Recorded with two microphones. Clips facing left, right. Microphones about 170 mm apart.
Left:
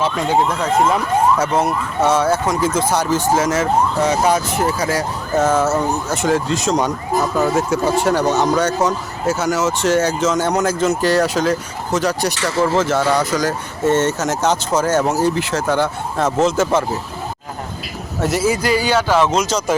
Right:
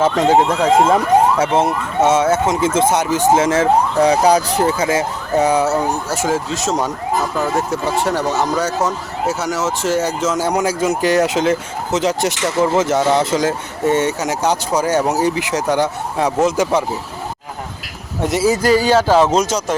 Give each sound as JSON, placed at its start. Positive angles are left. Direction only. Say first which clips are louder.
{"t": 0.3, "sound": "speech", "louder": "right 4 dB", "side_deg": -70}
{"t": 0.8, "sound": "speech", "louder": "right 2 dB", "side_deg": -25}
{"t": 4.9, "sound": "speech", "louder": "right 2 dB", "side_deg": -15}
{"t": 18.2, "sound": "speech", "louder": "right 1 dB", "side_deg": -20}
{"t": 18.4, "sound": "speech", "louder": "right 5 dB", "side_deg": -40}